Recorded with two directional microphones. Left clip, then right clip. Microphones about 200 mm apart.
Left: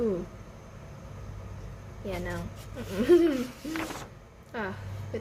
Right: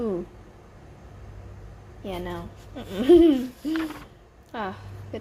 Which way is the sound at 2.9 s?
20° right (ahead or behind).